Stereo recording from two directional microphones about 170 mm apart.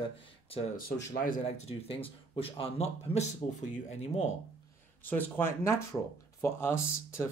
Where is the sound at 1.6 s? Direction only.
30° left (ahead or behind).